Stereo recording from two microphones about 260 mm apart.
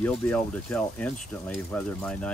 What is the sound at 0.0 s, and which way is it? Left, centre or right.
Speech, centre.